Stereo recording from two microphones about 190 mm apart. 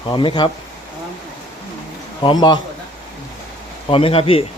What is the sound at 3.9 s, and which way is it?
Speech, 30° left (ahead or behind).